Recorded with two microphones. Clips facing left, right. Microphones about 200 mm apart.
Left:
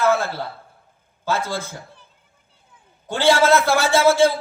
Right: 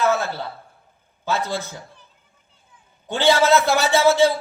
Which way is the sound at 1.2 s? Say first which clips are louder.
Even; 15° right (ahead or behind).